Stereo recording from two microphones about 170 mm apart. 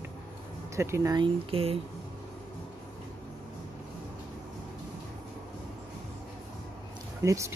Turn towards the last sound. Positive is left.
turn(degrees=-15)  # may be behind; listen again after turning